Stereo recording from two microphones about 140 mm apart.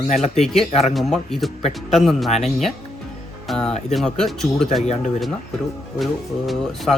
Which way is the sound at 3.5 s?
5° left (ahead or behind).